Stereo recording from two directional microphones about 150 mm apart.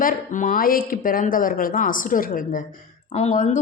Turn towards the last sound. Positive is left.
turn(degrees=50)  # may be behind; listen again after turning